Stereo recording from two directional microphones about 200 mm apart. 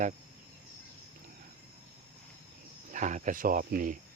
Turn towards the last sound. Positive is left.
turn(degrees=-45)  # may be behind; listen again after turning